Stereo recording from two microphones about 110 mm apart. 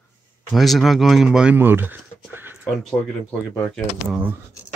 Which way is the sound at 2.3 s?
20° right (ahead or behind).